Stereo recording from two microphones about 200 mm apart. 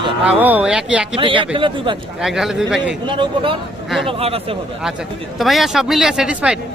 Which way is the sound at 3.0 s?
25° right (ahead or behind).